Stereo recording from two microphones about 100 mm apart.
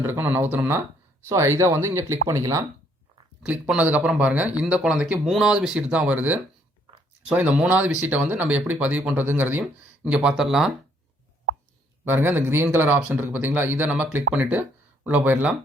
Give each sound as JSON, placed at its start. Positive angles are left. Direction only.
{"t": 0.0, "sound": "speech", "side_deg": -20}
{"t": 1.3, "sound": "speech", "side_deg": -30}
{"t": 3.4, "sound": "speech", "side_deg": -15}
{"t": 12.0, "sound": "speech", "side_deg": -20}